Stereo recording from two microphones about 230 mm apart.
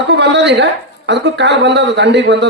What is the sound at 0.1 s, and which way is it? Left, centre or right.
Speech, right.